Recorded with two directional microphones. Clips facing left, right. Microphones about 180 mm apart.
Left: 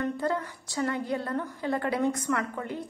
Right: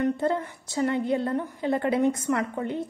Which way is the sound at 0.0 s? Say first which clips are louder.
Right 4 dB; 25° right (ahead or behind).